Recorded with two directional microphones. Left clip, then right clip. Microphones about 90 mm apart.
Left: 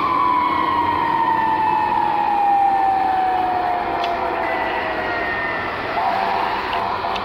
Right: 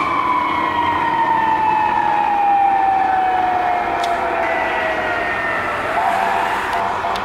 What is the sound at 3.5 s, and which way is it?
Vehicle, 25° right (ahead or behind).